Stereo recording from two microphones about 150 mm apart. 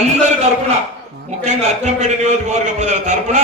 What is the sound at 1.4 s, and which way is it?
A man's voice, 50° right (ahead or behind).